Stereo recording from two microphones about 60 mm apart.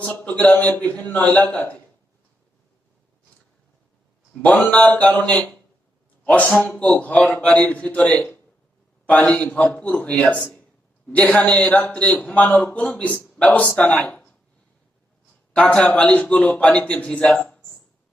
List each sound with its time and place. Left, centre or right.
0.3 s a man's voice: left
4.7 s a man's voice: left
15.5 s a man's voice: centre